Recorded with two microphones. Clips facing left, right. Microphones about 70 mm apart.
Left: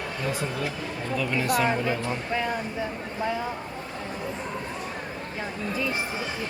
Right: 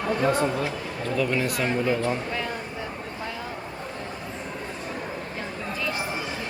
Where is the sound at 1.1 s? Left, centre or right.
Centre.